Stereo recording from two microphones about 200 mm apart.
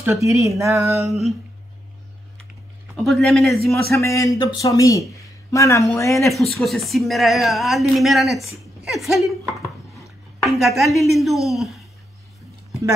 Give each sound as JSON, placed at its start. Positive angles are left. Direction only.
{"t": 0.0, "sound": "speech", "side_deg": -15}
{"t": 1.0, "sound": "speech", "side_deg": 0}
{"t": 3.0, "sound": "speech", "side_deg": 0}
{"t": 3.9, "sound": "speech", "side_deg": 15}
{"t": 5.1, "sound": "a sound", "side_deg": 15}
{"t": 6.1, "sound": "speech", "side_deg": 0}